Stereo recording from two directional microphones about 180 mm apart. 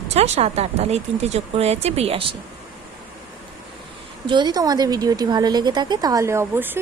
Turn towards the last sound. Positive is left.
turn(degrees=-15)  # may be behind; listen again after turning